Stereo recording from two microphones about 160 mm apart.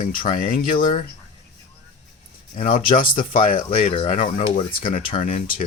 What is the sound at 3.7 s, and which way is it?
Speech, 35° left (ahead or behind).